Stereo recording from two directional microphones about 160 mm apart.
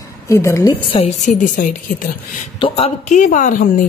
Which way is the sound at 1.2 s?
50° left (ahead or behind).